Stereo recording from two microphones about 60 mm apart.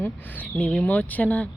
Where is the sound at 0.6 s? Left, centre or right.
Centre.